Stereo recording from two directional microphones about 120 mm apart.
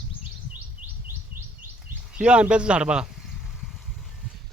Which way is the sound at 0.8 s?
90° right.